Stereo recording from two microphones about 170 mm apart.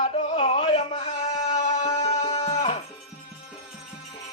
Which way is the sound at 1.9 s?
40° left (ahead or behind).